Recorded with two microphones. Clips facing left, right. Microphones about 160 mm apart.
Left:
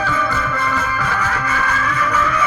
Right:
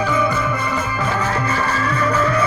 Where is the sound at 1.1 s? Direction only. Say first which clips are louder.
Right 1 dB; 30° right (ahead or behind).